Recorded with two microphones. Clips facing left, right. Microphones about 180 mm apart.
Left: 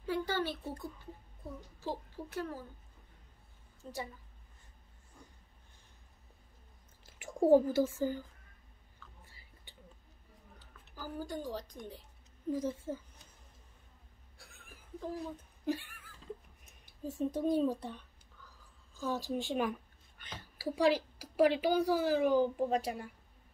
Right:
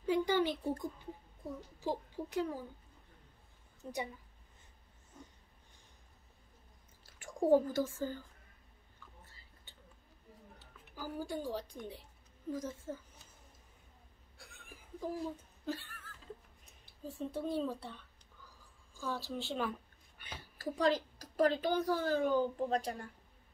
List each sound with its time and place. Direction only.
0.0 s a sound: 15° right (ahead or behind)
3.8 s a woman's voice: 15° right (ahead or behind)
7.2 s speech: 10° left (ahead or behind)
9.2 s whispering: 10° left (ahead or behind)
10.9 s a woman's voice: 10° right (ahead or behind)
12.6 s a woman's voice: 10° left (ahead or behind)
14.4 s laughter: centre (ahead or behind)
15.1 s a sound: 15° left (ahead or behind)
16.8 s a woman's voice: 15° left (ahead or behind)
19.0 s a woman's voice: 15° left (ahead or behind)
20.2 s a sound: 10° right (ahead or behind)
20.5 s a woman's voice: 10° left (ahead or behind)